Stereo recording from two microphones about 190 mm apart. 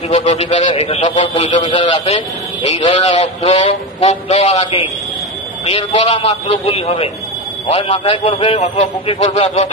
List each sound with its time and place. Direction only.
0.1 s speech: 35° left (ahead or behind)
1.5 s a man's voice: 25° left (ahead or behind)